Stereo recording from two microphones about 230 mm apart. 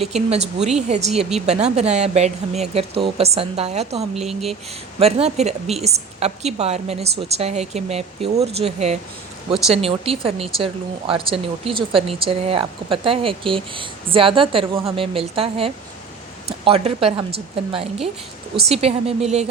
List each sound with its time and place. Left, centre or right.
0.0 s speech: right
4.3 s speech: centre
4.9 s speech: right